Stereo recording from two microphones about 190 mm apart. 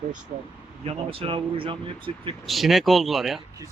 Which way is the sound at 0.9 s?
30° right (ahead or behind).